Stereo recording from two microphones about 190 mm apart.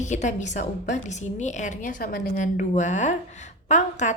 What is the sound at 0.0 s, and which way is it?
A woman's voice, 40° left (ahead or behind).